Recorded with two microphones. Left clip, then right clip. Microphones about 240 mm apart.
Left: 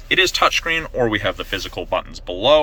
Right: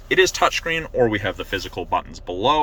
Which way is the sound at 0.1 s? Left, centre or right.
Centre.